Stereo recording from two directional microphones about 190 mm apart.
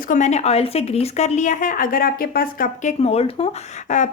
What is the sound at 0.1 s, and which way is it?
A woman's voice, 40° left (ahead or behind).